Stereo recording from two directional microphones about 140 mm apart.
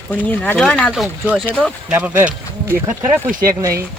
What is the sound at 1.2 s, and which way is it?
Speech, 10° right (ahead or behind).